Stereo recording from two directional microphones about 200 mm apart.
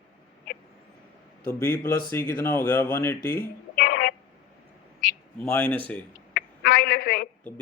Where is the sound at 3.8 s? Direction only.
45° left (ahead or behind).